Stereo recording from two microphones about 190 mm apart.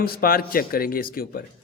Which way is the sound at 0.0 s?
50° left (ahead or behind).